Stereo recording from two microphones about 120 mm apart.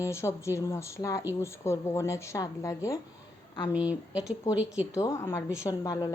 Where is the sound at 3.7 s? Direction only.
10° right (ahead or behind).